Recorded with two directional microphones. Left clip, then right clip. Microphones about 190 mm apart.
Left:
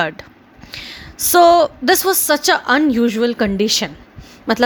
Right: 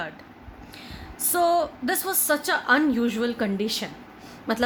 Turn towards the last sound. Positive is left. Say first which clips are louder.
# left 9 dB
turn(degrees=40)  # may be behind; listen again after turning